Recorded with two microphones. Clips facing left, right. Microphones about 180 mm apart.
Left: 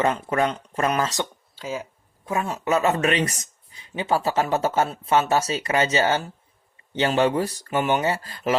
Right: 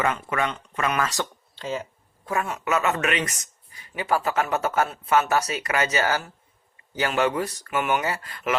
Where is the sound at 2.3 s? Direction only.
25° left (ahead or behind).